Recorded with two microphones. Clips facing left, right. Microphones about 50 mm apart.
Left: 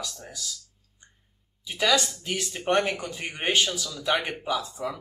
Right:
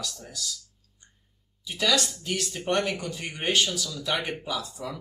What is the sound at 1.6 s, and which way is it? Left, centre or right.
Speech, centre.